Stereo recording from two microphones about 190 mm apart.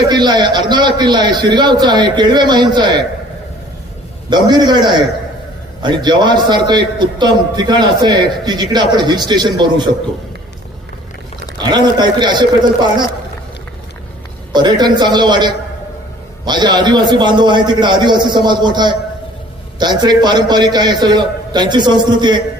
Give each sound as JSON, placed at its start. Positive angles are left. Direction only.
{"t": 0.1, "sound": "a man's voice", "side_deg": -20}
{"t": 4.3, "sound": "a man's voice", "side_deg": -25}
{"t": 11.5, "sound": "a man's voice", "side_deg": -20}
{"t": 14.5, "sound": "a man's voice", "side_deg": -25}